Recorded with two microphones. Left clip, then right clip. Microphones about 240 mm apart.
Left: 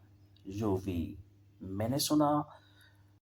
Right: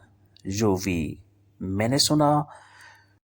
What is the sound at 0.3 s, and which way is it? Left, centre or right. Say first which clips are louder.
Speech: right 10 dB; right.